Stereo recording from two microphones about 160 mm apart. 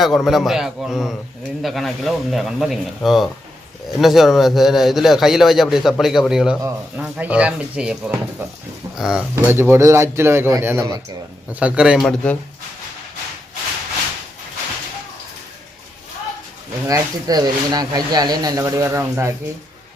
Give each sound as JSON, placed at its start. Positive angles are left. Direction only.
{"t": 0.0, "sound": "a man's voice", "side_deg": 0}
{"t": 9.3, "sound": "a man's voice", "side_deg": -15}
{"t": 11.6, "sound": "a man's voice", "side_deg": -5}
{"t": 16.8, "sound": "speech", "side_deg": -20}